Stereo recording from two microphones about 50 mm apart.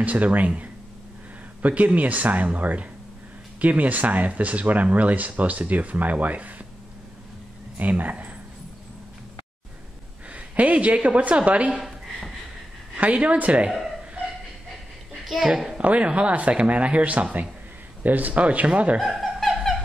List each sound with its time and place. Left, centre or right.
0.0 s speech: right
1.6 s speech: right
7.7 s speech: right
10.3 s speech: right
12.9 s speech: right
15.2 s a woman's voice: centre
15.8 s speech: right
18.9 s laughter: centre